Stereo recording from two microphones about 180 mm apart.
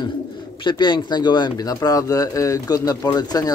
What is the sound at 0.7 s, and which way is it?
Speech, 25° left (ahead or behind).